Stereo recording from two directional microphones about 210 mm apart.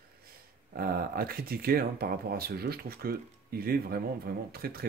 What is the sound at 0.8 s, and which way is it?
Speech, 45° right (ahead or behind).